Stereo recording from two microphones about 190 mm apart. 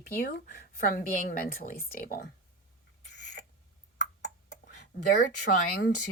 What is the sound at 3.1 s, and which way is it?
Rodents, 65° left (ahead or behind).